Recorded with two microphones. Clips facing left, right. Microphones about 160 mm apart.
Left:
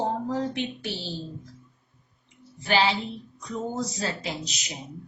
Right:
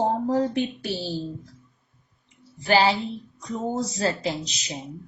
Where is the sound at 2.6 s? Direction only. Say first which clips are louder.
Right 4 dB; 40° right (ahead or behind).